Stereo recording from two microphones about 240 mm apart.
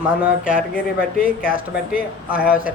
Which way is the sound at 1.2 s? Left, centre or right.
Left.